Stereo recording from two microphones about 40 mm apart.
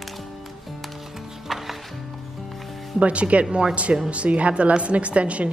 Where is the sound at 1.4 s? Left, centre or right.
Centre.